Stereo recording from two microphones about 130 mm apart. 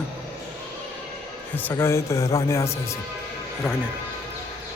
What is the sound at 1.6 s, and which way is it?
A man's voice, 15° left (ahead or behind).